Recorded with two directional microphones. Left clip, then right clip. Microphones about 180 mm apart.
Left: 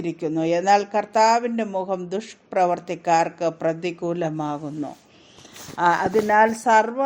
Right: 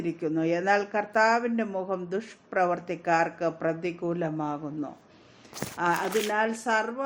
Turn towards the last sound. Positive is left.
turn(degrees=35)  # may be behind; listen again after turning